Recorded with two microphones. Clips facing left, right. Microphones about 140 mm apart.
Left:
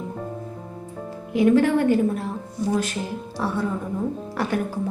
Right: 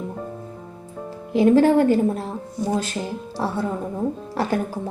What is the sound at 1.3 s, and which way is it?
Speech, 30° right (ahead or behind).